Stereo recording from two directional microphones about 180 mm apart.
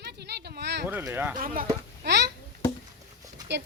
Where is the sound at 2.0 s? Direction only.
65° right (ahead or behind).